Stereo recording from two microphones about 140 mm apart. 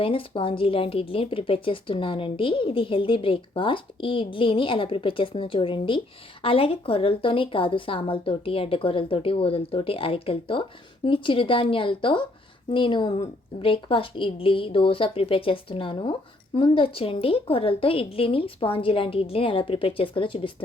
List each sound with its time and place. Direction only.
0.0 s speech: 40° left (ahead or behind)